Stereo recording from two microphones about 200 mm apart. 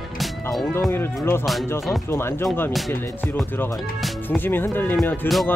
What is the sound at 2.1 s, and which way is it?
Speech, 10° left (ahead or behind).